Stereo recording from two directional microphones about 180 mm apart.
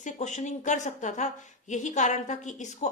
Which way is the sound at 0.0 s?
40° left (ahead or behind).